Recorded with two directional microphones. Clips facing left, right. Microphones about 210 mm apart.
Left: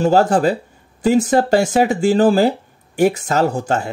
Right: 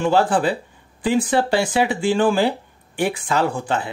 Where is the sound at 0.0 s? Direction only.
40° left (ahead or behind).